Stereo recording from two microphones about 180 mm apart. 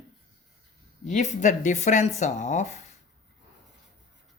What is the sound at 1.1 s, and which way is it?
Speech, 40° left (ahead or behind).